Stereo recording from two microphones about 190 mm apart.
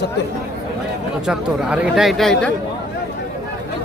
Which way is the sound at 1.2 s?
5° right (ahead or behind).